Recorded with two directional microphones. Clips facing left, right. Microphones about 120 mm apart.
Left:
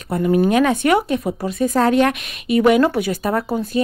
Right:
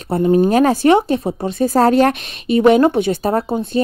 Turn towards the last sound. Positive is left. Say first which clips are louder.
# right 2 dB
turn(degrees=-25)  # may be behind; listen again after turning